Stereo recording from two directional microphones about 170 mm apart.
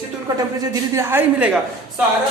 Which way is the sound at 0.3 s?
20° right (ahead or behind).